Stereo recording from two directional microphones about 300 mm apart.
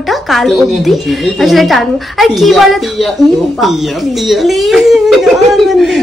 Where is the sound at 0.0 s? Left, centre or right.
Centre.